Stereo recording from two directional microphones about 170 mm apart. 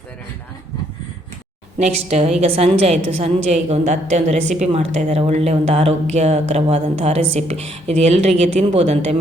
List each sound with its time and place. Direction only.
1.8 s a woman's voice: 40° right (ahead or behind)